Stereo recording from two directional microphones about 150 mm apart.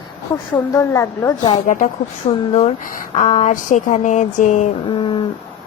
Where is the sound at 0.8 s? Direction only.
20° left (ahead or behind).